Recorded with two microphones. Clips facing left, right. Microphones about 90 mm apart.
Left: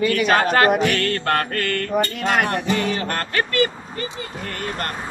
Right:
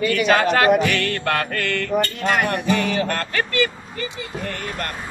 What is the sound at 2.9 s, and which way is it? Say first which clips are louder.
Speech: right 1 dB; 50° left (ahead or behind).